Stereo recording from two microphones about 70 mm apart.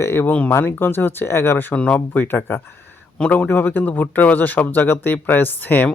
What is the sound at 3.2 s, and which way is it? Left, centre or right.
Speech, centre.